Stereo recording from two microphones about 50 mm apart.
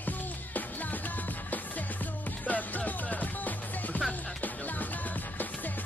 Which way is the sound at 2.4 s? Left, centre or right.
Left.